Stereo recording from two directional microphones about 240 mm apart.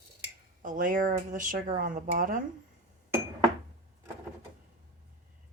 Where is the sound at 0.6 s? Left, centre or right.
Right.